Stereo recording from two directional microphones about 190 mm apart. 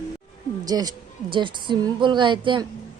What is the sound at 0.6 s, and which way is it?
A woman's voice, 20° right (ahead or behind).